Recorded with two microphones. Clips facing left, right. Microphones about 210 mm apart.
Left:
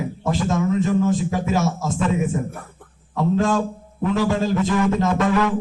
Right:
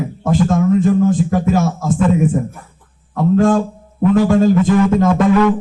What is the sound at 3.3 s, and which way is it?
A man's voice, 50° right (ahead or behind).